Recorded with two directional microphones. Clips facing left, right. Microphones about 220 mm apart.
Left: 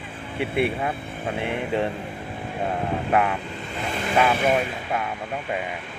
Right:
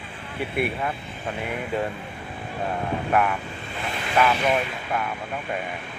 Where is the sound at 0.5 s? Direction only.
25° left (ahead or behind).